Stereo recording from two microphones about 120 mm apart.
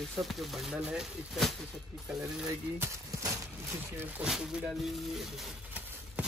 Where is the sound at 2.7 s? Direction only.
25° right (ahead or behind).